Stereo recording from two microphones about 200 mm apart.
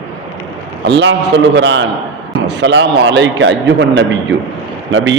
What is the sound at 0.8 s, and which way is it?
A man's voice, 60° right (ahead or behind).